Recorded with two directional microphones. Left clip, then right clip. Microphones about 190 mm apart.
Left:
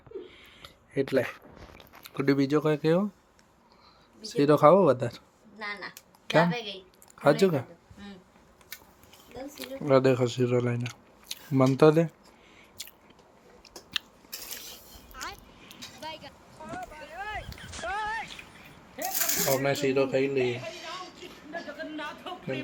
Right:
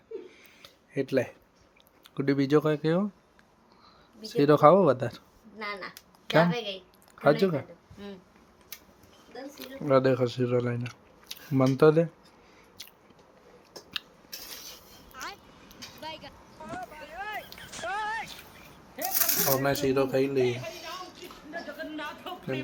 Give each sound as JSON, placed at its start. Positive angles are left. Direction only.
{"t": 0.3, "sound": "a sound", "side_deg": 0}
{"t": 2.1, "sound": "speech", "side_deg": 0}
{"t": 4.2, "sound": "speech", "side_deg": 0}
{"t": 7.2, "sound": "speech", "side_deg": 10}
{"t": 9.6, "sound": "speech", "side_deg": 10}
{"t": 12.8, "sound": "biting", "side_deg": 10}
{"t": 15.1, "sound": "a sound", "side_deg": 0}
{"t": 19.3, "sound": "speech", "side_deg": -10}
{"t": 20.4, "sound": "a sound", "side_deg": 0}